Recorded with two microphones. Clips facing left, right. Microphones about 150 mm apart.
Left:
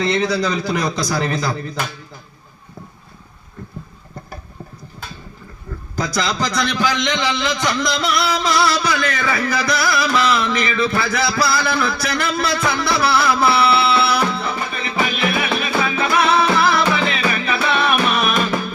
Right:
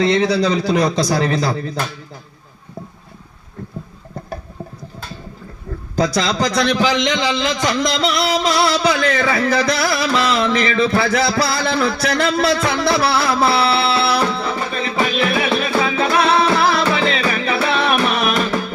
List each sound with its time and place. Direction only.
0.0 s a man's voice: 30° right (ahead or behind)
6.2 s a man's voice: 30° right (ahead or behind)